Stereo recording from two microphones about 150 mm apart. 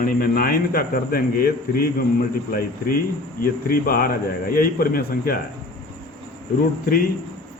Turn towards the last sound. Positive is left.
turn(degrees=90)